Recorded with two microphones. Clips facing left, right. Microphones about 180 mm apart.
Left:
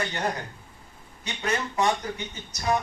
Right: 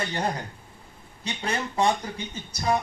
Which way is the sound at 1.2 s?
30° right (ahead or behind).